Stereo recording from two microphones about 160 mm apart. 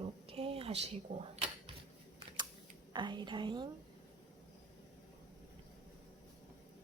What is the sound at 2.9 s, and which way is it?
Speech, 30° right (ahead or behind).